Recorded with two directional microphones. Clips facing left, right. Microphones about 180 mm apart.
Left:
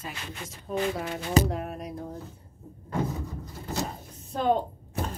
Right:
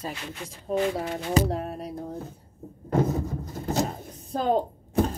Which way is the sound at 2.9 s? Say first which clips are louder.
Right 6 dB; 45° right (ahead or behind).